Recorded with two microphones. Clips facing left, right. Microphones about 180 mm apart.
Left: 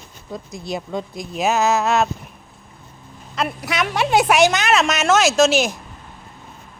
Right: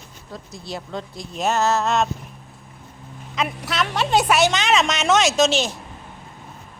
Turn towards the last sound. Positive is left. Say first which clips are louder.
# left 3 dB
turn(degrees=10)  # may be behind; listen again after turning